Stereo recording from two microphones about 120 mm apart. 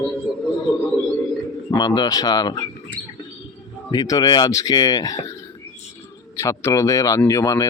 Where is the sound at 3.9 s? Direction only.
35° left (ahead or behind).